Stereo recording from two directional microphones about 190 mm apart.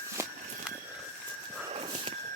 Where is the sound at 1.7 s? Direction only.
30° right (ahead or behind).